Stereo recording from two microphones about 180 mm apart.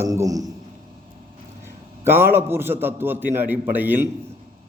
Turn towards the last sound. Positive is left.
turn(degrees=-10)  # may be behind; listen again after turning